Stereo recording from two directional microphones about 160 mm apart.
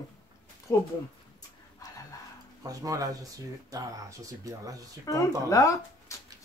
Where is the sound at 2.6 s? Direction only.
20° right (ahead or behind).